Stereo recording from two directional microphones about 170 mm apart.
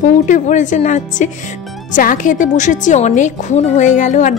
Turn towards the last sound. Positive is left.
turn(degrees=45)  # may be behind; listen again after turning